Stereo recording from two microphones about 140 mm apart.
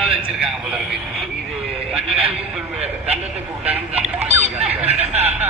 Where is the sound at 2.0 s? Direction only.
45° right (ahead or behind).